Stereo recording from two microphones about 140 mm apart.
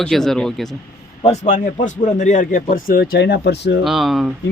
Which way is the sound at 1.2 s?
50° left (ahead or behind).